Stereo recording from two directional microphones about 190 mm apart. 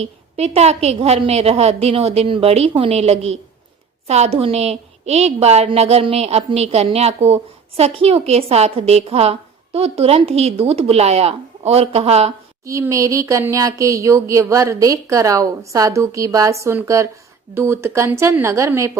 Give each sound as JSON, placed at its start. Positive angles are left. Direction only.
{"t": 0.0, "sound": "a woman's voice", "side_deg": -35}
{"t": 12.6, "sound": "speech", "side_deg": -15}